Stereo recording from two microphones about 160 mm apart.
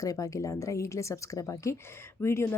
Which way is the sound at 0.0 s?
20° left (ahead or behind).